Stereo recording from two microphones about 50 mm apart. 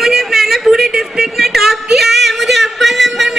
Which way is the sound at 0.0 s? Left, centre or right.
Centre.